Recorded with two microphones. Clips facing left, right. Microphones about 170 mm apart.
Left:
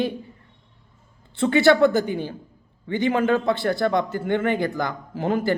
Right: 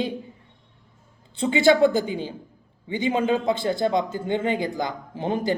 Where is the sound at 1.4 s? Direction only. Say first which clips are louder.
Left 1 dB; 15° right (ahead or behind).